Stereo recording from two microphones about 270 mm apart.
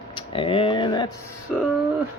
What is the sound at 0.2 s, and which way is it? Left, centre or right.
Speech, centre.